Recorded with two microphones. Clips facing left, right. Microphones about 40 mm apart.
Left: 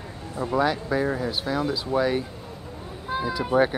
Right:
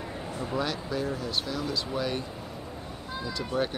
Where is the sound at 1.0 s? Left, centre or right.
Left.